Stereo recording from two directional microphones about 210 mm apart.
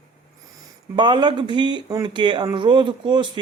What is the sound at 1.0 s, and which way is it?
Speech, 20° right (ahead or behind).